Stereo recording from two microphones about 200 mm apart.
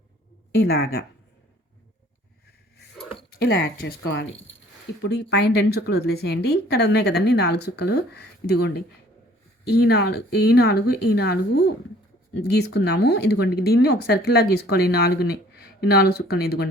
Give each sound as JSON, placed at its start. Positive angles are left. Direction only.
{"t": 0.5, "sound": "speech", "side_deg": 50}
{"t": 3.3, "sound": "speech", "side_deg": 50}
{"t": 5.3, "sound": "speech", "side_deg": 55}